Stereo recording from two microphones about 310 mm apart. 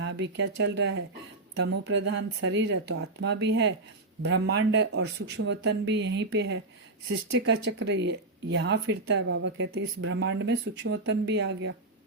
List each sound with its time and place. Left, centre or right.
0.0 s speech: right